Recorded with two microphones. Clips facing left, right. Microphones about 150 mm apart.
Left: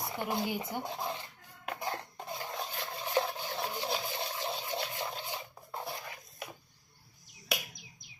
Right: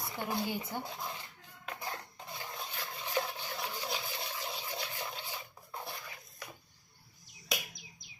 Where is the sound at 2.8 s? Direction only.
35° left (ahead or behind).